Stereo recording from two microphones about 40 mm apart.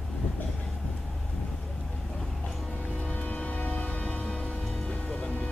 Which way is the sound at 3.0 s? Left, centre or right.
Left.